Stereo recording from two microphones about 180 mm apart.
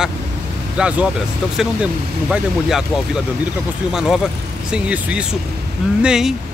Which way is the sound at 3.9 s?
5° right (ahead or behind).